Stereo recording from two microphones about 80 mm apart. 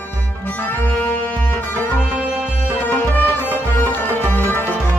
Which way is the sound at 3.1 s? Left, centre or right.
Left.